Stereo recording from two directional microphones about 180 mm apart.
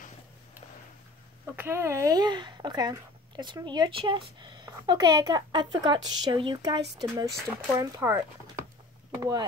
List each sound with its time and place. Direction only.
1.4 s speech: 10° right (ahead or behind)
9.2 s speech: 20° right (ahead or behind)